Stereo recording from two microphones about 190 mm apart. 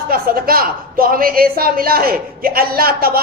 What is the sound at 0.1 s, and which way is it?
A woman's voice, 50° right (ahead or behind).